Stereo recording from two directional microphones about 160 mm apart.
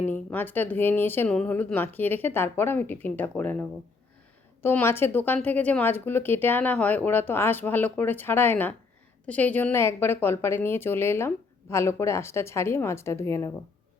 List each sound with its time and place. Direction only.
0.0 s a woman's voice: 10° left (ahead or behind)